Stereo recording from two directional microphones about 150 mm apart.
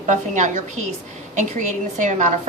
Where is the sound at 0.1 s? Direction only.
55° right (ahead or behind).